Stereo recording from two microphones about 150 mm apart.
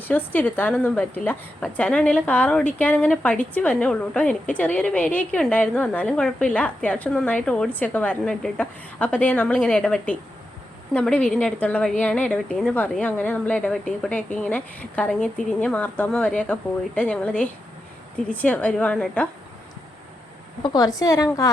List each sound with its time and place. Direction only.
0.0 s a woman's voice: 10° left (ahead or behind)
20.6 s a woman's voice: 25° left (ahead or behind)